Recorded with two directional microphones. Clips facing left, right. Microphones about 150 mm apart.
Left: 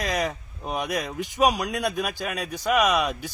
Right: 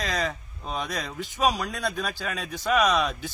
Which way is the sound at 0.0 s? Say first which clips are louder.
Left 2 dB; 15° left (ahead or behind).